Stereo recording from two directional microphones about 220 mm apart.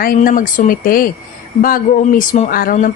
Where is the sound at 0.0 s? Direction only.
40° left (ahead or behind).